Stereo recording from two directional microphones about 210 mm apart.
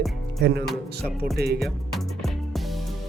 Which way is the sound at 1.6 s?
Centre (ahead or behind).